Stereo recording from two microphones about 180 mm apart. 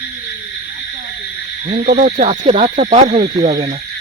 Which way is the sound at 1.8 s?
50° right (ahead or behind).